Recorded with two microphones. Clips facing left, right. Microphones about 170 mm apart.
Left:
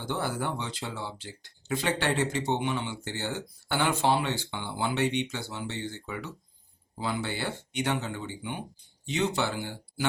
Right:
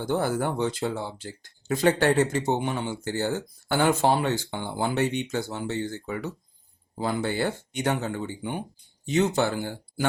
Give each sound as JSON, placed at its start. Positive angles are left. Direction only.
{"t": 0.0, "sound": "speech", "side_deg": -45}